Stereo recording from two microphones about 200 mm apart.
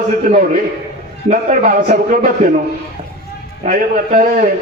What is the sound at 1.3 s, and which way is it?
A man's voice, 35° right (ahead or behind).